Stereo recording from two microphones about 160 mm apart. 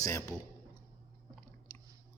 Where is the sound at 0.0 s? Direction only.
20° left (ahead or behind).